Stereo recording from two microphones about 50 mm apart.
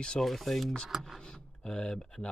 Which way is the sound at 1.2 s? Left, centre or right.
Centre.